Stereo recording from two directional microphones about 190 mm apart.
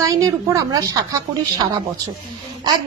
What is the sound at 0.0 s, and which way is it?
Speech, 15° right (ahead or behind).